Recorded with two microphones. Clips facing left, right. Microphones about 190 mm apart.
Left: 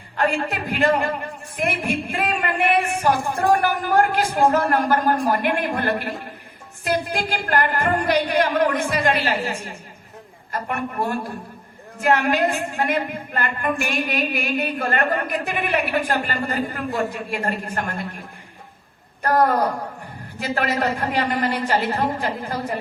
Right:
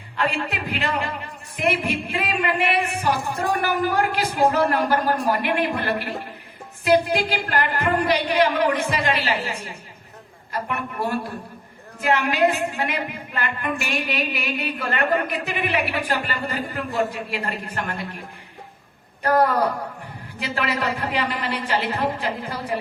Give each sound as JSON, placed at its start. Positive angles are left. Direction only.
{"t": 0.2, "sound": "a woman's voice", "side_deg": 40}
{"t": 20.4, "sound": "a woman's voice", "side_deg": 45}